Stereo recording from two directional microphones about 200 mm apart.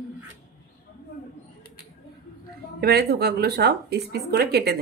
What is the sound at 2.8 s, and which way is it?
Speech, 55° right (ahead or behind).